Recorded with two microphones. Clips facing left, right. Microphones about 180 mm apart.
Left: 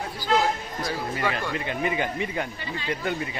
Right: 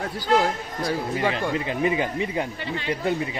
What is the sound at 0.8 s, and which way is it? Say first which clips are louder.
Speech: right 4 dB; 30° right (ahead or behind).